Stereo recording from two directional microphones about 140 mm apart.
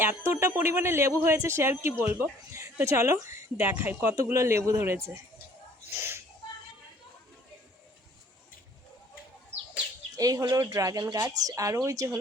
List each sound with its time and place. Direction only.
0.3 s a man's voice: 20° right (ahead or behind)
6.0 s a sound: 20° right (ahead or behind)
10.2 s a woman's voice: 25° right (ahead or behind)